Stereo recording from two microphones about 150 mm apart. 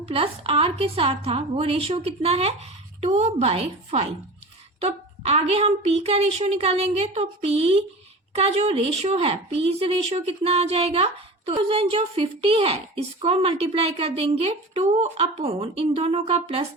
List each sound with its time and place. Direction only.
0.0 s a woman's voice: 40° right (ahead or behind)